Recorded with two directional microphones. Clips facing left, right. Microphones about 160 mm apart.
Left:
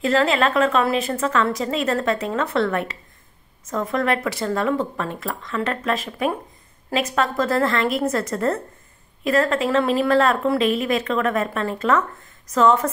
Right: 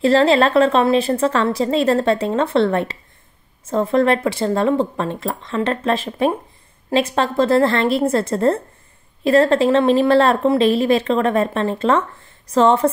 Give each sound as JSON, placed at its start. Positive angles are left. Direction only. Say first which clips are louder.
{"t": 0.0, "sound": "a woman's voice", "louder": "right 5 dB", "side_deg": -30}